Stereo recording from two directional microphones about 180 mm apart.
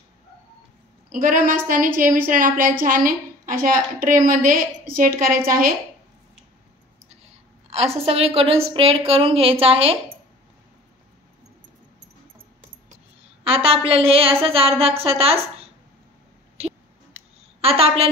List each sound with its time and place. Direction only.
1.1 s a woman's voice: 50° right (ahead or behind)
7.7 s a woman's voice: 35° right (ahead or behind)
13.4 s a woman's voice: 30° right (ahead or behind)
17.1 s a sound: 10° right (ahead or behind)
17.6 s a woman's voice: 35° right (ahead or behind)